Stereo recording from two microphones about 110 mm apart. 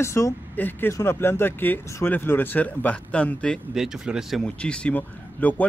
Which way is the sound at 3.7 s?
5° right (ahead or behind).